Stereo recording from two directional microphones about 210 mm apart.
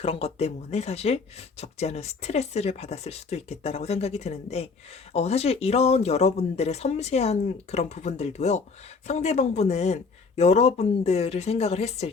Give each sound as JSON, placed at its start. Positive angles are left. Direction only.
{"t": 0.0, "sound": "speech", "side_deg": 30}